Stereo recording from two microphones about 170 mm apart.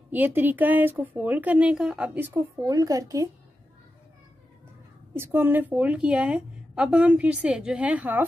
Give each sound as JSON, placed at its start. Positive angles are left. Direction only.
{"t": 0.1, "sound": "a woman's voice", "side_deg": -10}
{"t": 5.1, "sound": "a woman's voice", "side_deg": -15}